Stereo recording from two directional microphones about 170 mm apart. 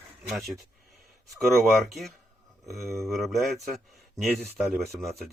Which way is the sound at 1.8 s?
Centre (ahead or behind).